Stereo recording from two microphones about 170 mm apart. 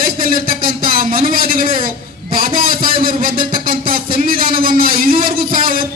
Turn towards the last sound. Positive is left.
turn(degrees=-55)  # may be behind; listen again after turning